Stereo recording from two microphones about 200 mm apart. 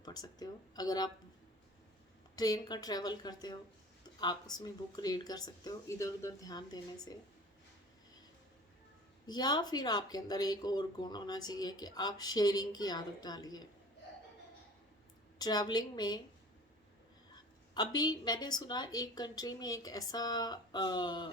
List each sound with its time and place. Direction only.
0.0 s speech: 20° left (ahead or behind)
2.3 s speech: 20° left (ahead or behind)
9.2 s speech: 20° left (ahead or behind)
15.4 s speech: 20° left (ahead or behind)
17.7 s speech: 20° left (ahead or behind)